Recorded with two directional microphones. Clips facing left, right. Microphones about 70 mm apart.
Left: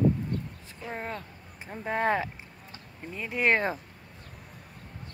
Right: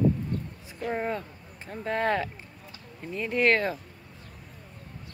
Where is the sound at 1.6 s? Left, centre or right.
Centre.